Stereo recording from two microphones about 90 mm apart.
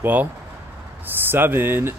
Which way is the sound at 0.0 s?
20° right (ahead or behind).